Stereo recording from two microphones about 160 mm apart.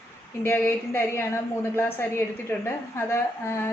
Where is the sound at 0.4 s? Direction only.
15° left (ahead or behind).